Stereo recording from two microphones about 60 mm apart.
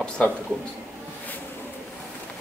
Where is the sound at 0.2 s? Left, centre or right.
Left.